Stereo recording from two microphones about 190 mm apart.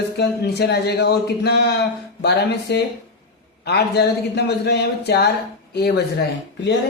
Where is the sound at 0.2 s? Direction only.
60° left (ahead or behind).